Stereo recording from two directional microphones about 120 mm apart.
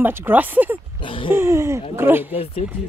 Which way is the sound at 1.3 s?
20° right (ahead or behind).